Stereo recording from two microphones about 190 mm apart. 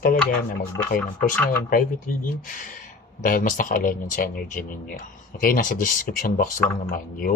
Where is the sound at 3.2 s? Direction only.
45° left (ahead or behind).